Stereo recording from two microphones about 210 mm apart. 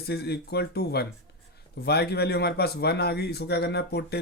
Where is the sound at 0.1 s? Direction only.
50° left (ahead or behind).